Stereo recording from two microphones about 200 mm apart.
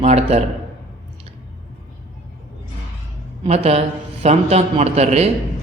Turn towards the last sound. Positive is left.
turn(degrees=-30)  # may be behind; listen again after turning